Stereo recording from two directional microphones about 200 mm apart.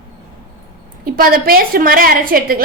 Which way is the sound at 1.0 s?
45° right (ahead or behind).